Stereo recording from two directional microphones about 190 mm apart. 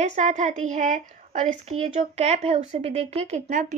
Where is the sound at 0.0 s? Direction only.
35° right (ahead or behind).